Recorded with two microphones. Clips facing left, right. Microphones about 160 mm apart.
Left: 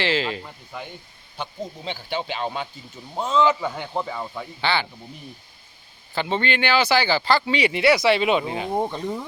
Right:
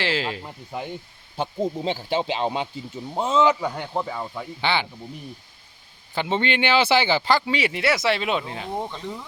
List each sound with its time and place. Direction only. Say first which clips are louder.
0.0 s speech: left 2 dB; 10° right (ahead or behind)
0.4 s speech: right 4 dB; 25° right (ahead or behind)
3.7 s speech: even; centre (ahead or behind)
4.6 s speech: even; 15° right (ahead or behind)
6.1 s speech: even; 15° right (ahead or behind)
7.4 s speech: left 4 dB; centre (ahead or behind)